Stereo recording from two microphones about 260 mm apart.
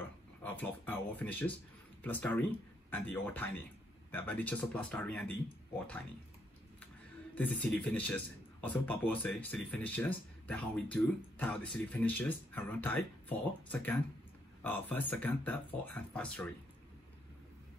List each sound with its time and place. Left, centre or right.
0.4 s speech: centre
7.3 s speech: centre